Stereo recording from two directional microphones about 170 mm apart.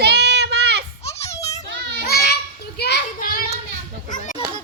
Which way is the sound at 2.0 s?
65° left (ahead or behind).